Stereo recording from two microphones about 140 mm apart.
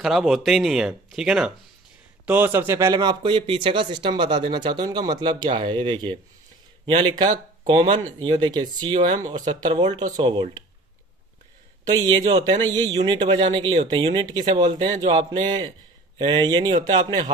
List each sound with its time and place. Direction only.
0.0 s speech: centre (ahead or behind); by 10.6 s 35° right (ahead or behind)
12.1 s speech: 30° right (ahead or behind)